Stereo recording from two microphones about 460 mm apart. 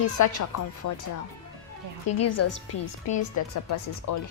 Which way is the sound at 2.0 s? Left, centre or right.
Left.